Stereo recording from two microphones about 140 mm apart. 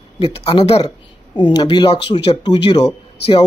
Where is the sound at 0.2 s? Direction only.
45° left (ahead or behind).